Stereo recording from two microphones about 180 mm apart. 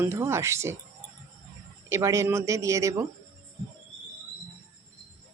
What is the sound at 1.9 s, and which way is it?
Speech, 15° right (ahead or behind).